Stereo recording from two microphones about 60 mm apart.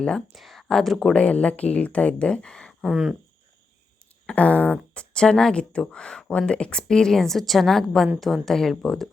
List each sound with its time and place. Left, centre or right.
0.3 s speech: centre
2.8 s cricket: centre
4.3 s speech: left
5.1 s speech: centre